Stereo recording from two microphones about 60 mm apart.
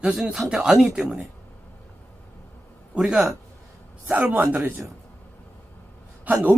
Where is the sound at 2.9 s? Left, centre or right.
Centre.